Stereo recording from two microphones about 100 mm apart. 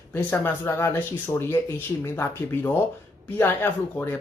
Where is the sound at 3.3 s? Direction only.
25° left (ahead or behind).